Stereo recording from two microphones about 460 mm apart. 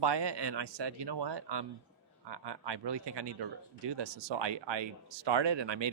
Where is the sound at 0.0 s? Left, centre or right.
Right.